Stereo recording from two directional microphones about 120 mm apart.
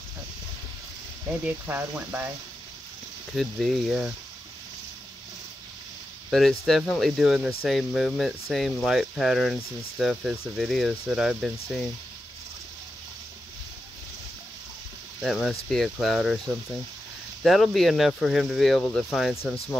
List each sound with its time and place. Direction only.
1.4 s speech: 15° right (ahead or behind)
3.3 s speech: centre (ahead or behind)
6.3 s speech: centre (ahead or behind)
15.2 s speech: centre (ahead or behind)
17.4 s speech: centre (ahead or behind)
18.8 s speech: 15° left (ahead or behind)